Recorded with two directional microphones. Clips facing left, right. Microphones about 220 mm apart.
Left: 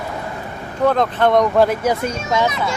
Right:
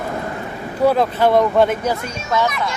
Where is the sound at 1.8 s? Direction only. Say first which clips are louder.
Left 3 dB; 15° left (ahead or behind).